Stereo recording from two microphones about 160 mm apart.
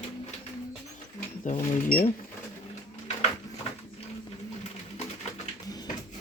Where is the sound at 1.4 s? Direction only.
55° left (ahead or behind).